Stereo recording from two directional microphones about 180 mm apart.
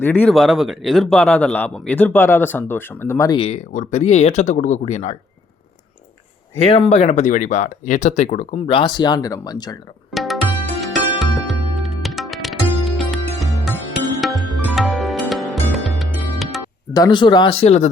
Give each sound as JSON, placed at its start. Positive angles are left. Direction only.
{"t": 0.0, "sound": "a man's voice", "side_deg": 5}
{"t": 3.3, "sound": "speech", "side_deg": 40}
{"t": 6.6, "sound": "speech", "side_deg": 30}
{"t": 10.1, "sound": "tabla", "side_deg": 0}
{"t": 10.8, "sound": "music", "side_deg": 0}
{"t": 16.9, "sound": "speech", "side_deg": 25}